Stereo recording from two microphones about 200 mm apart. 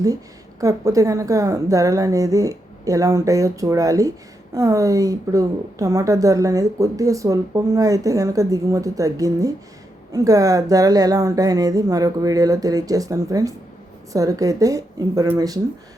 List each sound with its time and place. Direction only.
0.6 s a woman's voice: 15° right (ahead or behind)